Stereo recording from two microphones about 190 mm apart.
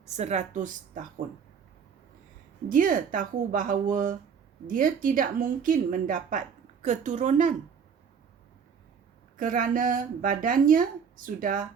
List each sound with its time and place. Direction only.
0.2 s a woman's voice: 35° right (ahead or behind)
2.6 s a woman's voice: 45° right (ahead or behind)
9.4 s speech: 45° right (ahead or behind)